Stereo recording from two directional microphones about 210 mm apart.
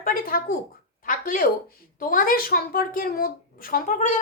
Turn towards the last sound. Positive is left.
turn(degrees=35)  # may be behind; listen again after turning